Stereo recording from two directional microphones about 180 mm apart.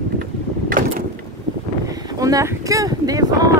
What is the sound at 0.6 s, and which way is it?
Vehicle, 50° right (ahead or behind).